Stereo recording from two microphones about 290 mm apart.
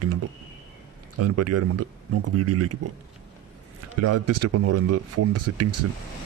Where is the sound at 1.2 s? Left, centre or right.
Right.